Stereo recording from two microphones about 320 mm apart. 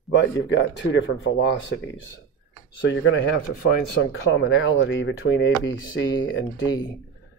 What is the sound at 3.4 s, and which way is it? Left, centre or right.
Speech, left.